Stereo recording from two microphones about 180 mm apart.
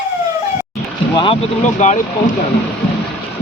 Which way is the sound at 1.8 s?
40° left (ahead or behind).